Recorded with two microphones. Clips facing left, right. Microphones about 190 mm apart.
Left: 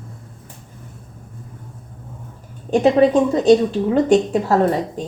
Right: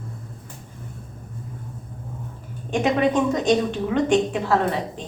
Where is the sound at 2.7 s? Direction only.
35° left (ahead or behind).